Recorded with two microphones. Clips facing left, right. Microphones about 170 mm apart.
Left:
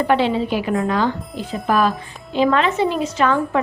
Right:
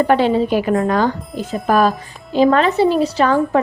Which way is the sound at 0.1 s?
45° right (ahead or behind).